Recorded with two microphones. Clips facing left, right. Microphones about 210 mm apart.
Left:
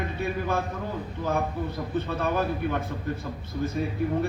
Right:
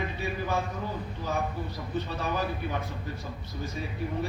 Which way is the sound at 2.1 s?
55° left (ahead or behind).